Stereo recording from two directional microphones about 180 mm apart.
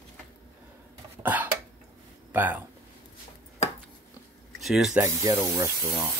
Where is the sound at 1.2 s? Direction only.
10° right (ahead or behind).